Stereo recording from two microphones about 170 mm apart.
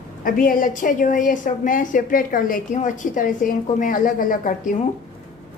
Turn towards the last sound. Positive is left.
turn(degrees=50)  # may be behind; listen again after turning